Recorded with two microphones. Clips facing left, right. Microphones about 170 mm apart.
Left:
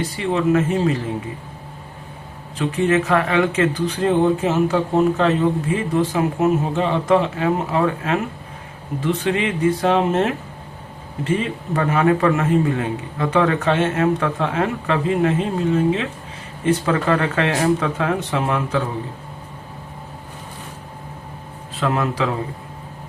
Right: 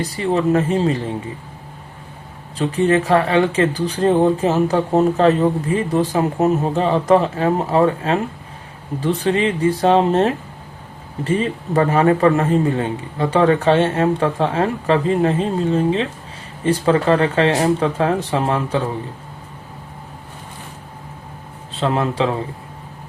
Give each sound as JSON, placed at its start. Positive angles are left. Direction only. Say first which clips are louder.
{"t": 0.0, "sound": "speech", "louder": "right 2 dB", "side_deg": -35}
{"t": 2.6, "sound": "speech", "louder": "right 2 dB", "side_deg": -35}
{"t": 21.7, "sound": "speech", "louder": "right 2 dB", "side_deg": -30}